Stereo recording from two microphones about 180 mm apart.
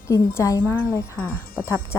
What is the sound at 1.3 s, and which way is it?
Speech, 55° left (ahead or behind).